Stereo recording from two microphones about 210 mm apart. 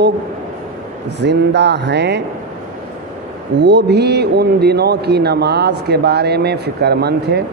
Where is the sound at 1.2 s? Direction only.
55° right (ahead or behind).